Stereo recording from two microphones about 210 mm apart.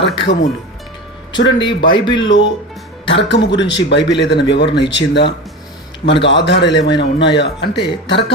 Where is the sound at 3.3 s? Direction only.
55° left (ahead or behind).